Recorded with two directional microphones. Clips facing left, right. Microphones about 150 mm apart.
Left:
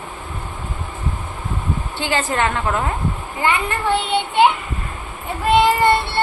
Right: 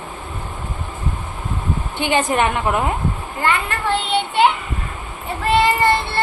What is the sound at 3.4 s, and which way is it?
Speech, 15° left (ahead or behind).